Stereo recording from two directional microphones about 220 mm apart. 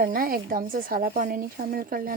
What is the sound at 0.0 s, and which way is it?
Speech, 40° right (ahead or behind).